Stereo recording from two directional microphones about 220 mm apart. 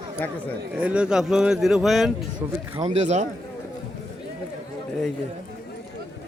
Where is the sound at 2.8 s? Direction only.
35° right (ahead or behind).